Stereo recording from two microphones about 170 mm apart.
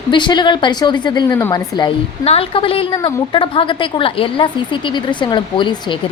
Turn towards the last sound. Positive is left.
turn(degrees=25)  # may be behind; listen again after turning